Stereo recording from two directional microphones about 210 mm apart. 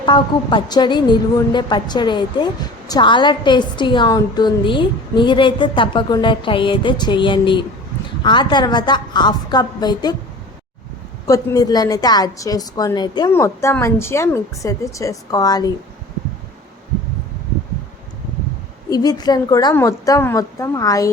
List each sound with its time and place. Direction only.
0.0 s a woman's voice: 20° left (ahead or behind)
11.3 s a woman's voice: 20° left (ahead or behind)
18.9 s a woman's voice: 20° left (ahead or behind)